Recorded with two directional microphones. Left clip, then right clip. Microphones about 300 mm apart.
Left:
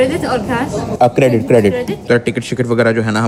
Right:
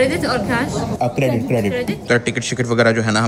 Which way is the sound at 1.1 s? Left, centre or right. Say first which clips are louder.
Left 8 dB; centre.